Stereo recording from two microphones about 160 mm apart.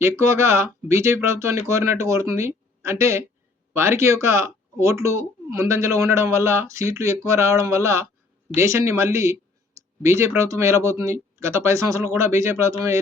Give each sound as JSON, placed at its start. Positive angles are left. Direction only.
{"t": 0.2, "sound": "speech", "side_deg": -15}